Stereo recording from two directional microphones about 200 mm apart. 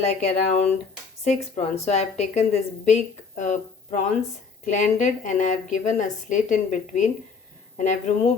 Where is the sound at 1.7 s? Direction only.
30° left (ahead or behind).